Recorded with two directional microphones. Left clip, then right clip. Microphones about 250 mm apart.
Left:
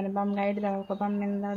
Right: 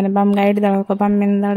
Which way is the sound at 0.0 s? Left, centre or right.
Right.